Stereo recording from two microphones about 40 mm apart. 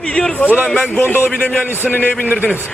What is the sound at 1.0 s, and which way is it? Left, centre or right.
Speech, left.